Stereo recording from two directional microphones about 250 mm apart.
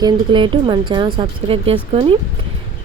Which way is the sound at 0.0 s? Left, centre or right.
Centre.